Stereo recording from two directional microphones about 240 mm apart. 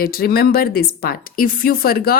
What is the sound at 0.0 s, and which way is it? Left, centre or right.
A woman's voice, left.